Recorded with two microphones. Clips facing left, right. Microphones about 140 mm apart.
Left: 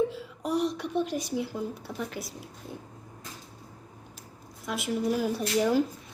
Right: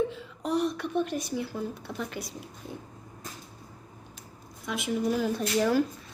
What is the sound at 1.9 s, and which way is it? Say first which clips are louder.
Speech: even; 5° left (ahead or behind).